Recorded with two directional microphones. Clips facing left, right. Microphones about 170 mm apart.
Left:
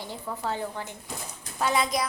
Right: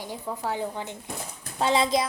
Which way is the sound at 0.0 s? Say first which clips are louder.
Right 1 dB; 15° right (ahead or behind).